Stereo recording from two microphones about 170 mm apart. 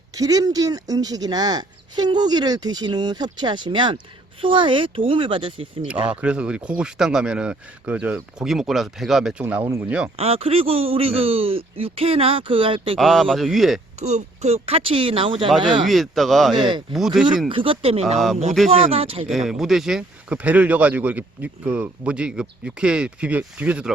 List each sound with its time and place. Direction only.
0.1 s speech: 20° right (ahead or behind)
6.1 s speech: 5° right (ahead or behind)
9.4 s speech: 15° right (ahead or behind)
10.2 s speech: 35° right (ahead or behind)
13.0 s speech: centre (ahead or behind)
14.0 s speech: 40° right (ahead or behind)
15.9 s speech: centre (ahead or behind)
17.5 s speech: 30° right (ahead or behind)
19.3 s speech: centre (ahead or behind)